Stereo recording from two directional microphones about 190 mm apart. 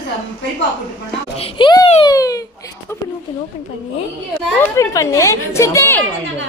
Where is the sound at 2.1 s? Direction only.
20° left (ahead or behind).